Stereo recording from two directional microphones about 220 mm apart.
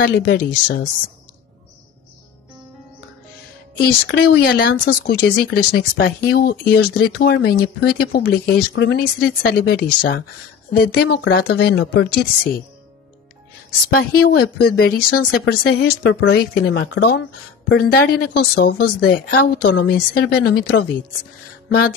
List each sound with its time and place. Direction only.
0.0 s speech: 50° left (ahead or behind)
3.8 s speech: 45° left (ahead or behind)
13.9 s speech: 45° left (ahead or behind)